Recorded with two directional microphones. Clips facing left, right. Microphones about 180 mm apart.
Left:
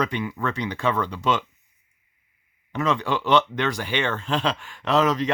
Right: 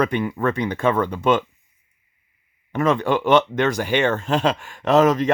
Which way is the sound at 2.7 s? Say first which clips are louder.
Right 5 dB; 50° right (ahead or behind).